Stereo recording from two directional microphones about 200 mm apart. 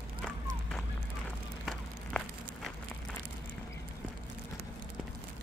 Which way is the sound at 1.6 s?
Centre (ahead or behind).